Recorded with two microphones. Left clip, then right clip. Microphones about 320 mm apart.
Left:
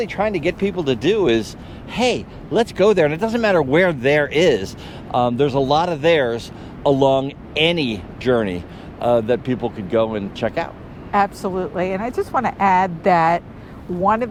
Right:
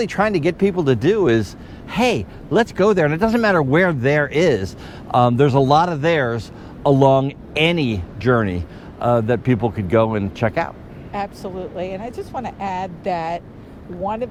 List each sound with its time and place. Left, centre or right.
0.0 s speech: right
3.2 s speech: right
5.1 s speech: right
6.8 s speech: right
11.1 s speech: left